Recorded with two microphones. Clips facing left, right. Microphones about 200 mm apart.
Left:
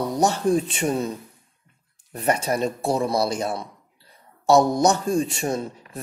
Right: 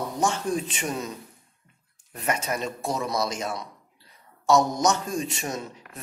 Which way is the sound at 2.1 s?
35° left (ahead or behind).